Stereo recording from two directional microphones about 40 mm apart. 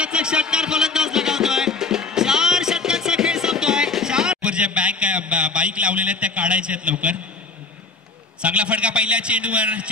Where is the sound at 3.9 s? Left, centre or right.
Centre.